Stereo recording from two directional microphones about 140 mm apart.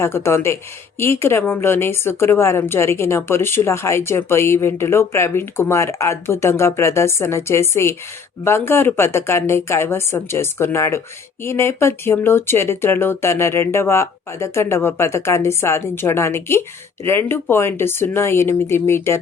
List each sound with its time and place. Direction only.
0.0 s speech: 15° left (ahead or behind)